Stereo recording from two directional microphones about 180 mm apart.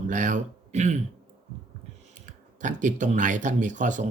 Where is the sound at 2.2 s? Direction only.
45° right (ahead or behind).